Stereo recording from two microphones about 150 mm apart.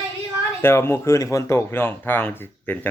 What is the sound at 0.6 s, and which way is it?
Speech, 15° left (ahead or behind).